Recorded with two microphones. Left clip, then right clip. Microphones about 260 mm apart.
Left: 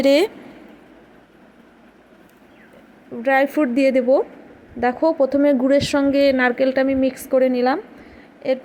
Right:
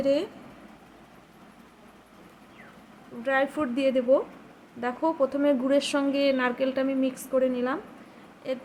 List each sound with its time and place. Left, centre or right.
0.0 s speech: left
3.2 s speech: left